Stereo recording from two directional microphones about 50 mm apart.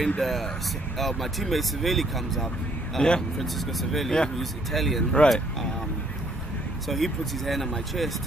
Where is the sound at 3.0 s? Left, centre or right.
Centre.